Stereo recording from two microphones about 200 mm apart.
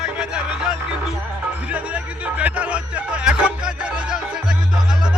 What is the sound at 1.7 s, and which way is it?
Music, 5° right (ahead or behind).